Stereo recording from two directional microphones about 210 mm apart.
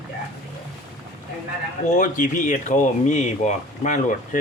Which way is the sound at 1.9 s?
35° left (ahead or behind).